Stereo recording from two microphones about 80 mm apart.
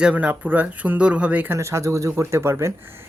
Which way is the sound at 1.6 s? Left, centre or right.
Right.